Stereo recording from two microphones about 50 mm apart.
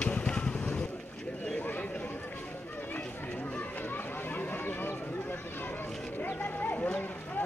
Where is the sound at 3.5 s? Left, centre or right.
Left.